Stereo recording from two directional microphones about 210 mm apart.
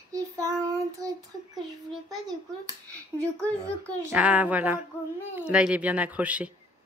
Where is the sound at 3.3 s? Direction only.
5° left (ahead or behind).